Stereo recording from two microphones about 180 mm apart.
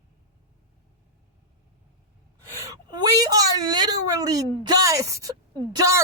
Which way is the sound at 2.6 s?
20° right (ahead or behind).